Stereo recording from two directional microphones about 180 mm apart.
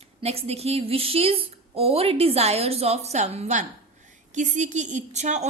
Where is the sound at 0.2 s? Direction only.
35° right (ahead or behind).